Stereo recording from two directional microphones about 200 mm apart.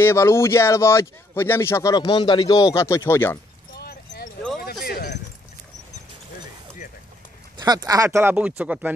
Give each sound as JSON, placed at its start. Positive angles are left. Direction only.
{"t": 0.0, "sound": "speech", "side_deg": 15}
{"t": 3.7, "sound": "clip-clop", "side_deg": 50}
{"t": 4.8, "sound": "a sound", "side_deg": 50}
{"t": 7.5, "sound": "speech", "side_deg": -20}